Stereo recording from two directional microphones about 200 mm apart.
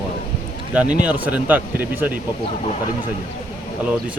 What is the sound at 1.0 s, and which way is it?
Speech, 5° right (ahead or behind).